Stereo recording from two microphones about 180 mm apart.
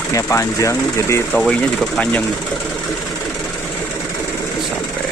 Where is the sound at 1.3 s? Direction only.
Centre (ahead or behind).